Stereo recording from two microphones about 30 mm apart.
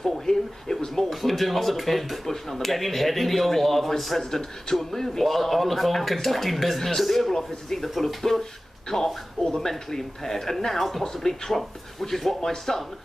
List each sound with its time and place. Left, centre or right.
0.3 s speech: centre
1.1 s speech: centre
4.2 s speech: centre